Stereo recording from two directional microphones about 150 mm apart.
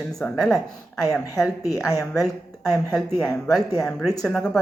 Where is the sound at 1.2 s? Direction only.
25° left (ahead or behind).